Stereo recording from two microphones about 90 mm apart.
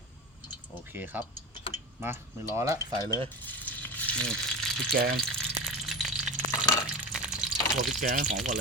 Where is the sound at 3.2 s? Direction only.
20° left (ahead or behind).